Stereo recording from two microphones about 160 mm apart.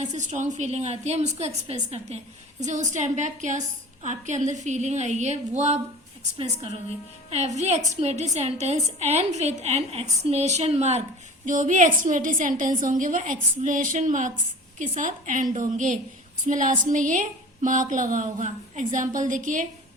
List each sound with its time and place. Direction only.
0.0 s a woman's voice: 45° right (ahead or behind)